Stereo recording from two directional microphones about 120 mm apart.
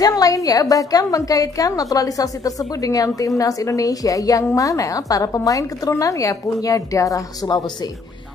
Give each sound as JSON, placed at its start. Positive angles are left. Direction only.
{"t": 0.0, "sound": "a woman's voice", "side_deg": 30}